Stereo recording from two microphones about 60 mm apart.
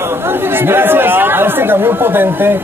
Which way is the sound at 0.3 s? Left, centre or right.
Right.